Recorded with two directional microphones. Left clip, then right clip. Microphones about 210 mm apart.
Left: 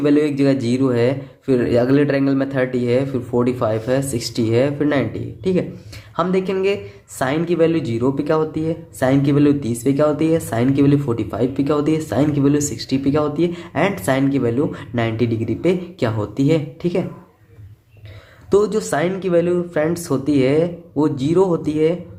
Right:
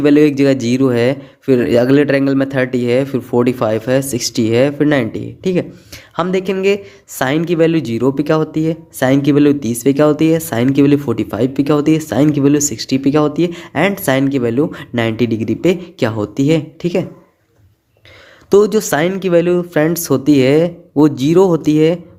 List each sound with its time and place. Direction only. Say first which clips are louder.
0.0 s speech: right 6 dB; 40° right (ahead or behind)
18.5 s speech: right 5 dB; 40° right (ahead or behind)